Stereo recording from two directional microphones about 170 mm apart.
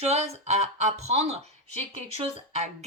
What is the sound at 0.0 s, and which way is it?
Speech, 40° right (ahead or behind).